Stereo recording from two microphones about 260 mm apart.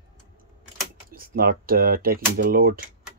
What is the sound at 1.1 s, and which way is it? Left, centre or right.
Speech, right.